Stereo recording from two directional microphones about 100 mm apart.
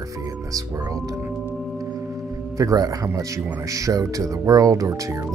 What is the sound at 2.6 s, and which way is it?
Speech, 35° right (ahead or behind).